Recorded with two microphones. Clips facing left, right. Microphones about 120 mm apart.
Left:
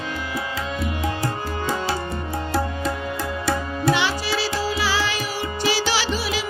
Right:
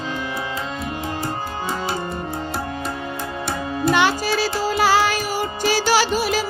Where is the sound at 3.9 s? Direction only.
50° right (ahead or behind).